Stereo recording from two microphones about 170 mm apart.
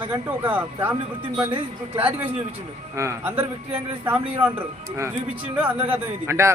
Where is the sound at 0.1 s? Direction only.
10° right (ahead or behind).